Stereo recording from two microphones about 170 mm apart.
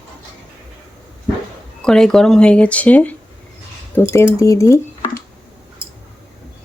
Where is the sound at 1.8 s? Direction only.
5° left (ahead or behind).